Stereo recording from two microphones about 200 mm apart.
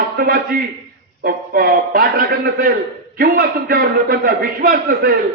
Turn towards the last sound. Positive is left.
turn(degrees=-50)  # may be behind; listen again after turning